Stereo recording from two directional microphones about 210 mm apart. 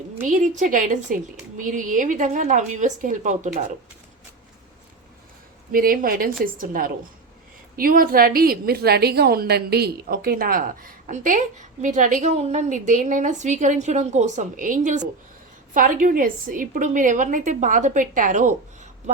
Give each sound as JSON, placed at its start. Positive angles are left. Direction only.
{"t": 0.2, "sound": "a woman's voice", "side_deg": -35}
{"t": 5.7, "sound": "a woman's voice", "side_deg": -45}